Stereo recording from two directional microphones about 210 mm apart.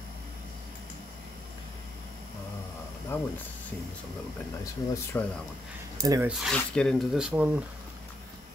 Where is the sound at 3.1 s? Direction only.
10° left (ahead or behind).